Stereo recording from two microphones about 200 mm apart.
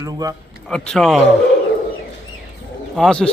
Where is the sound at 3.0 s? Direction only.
5° left (ahead or behind).